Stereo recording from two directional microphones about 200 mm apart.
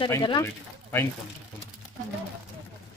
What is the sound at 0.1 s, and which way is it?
Speech, 20° left (ahead or behind).